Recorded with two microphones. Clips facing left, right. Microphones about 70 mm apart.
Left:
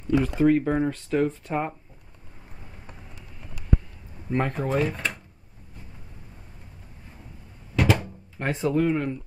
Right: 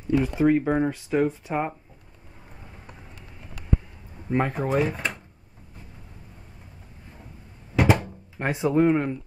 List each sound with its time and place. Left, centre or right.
0.2 s speech: centre
4.3 s speech: centre
7.7 s door: right
8.7 s speech: right